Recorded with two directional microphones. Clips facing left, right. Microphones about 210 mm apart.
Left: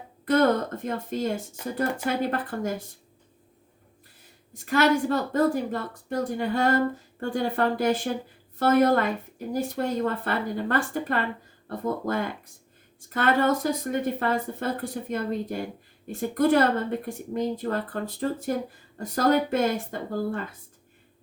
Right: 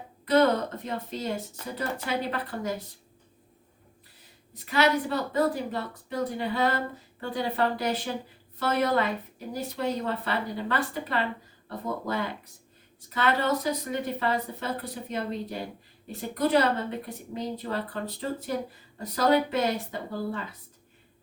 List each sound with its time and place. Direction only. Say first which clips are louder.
0.3 s a woman's voice: left 1 dB; 50° left (ahead or behind)
4.5 s a woman's voice: left 3 dB; 50° left (ahead or behind)